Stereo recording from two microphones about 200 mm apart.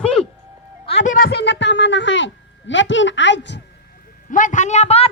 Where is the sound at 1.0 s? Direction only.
40° left (ahead or behind).